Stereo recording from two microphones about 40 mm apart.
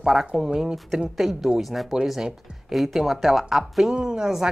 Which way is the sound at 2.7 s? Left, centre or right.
Centre.